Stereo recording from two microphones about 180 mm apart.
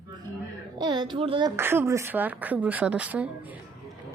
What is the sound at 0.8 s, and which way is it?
Speech, 25° right (ahead or behind).